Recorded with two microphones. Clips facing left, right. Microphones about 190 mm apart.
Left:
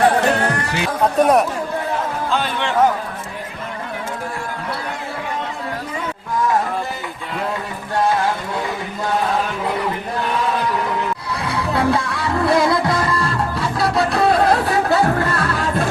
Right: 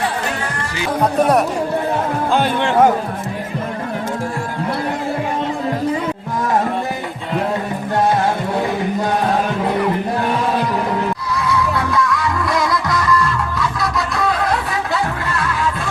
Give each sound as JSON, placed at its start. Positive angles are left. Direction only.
{"t": 1.2, "sound": "a man's voice", "side_deg": 0}
{"t": 2.3, "sound": "music", "side_deg": -50}
{"t": 11.3, "sound": "music", "side_deg": 30}